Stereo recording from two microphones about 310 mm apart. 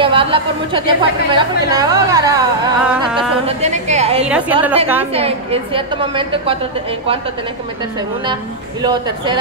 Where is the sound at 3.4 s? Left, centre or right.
Right.